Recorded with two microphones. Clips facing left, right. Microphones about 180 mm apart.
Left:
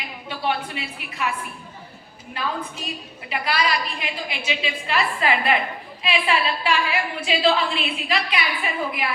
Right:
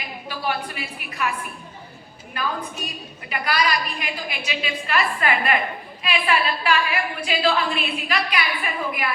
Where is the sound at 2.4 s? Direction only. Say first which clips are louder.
Right 1 dB; 25° left (ahead or behind).